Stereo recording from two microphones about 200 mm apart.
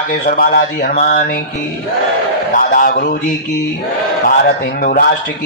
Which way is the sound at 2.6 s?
45° left (ahead or behind).